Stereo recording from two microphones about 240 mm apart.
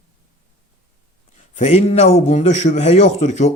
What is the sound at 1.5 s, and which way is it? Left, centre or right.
A man's voice, left.